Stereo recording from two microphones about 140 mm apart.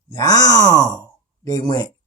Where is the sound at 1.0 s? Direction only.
25° left (ahead or behind).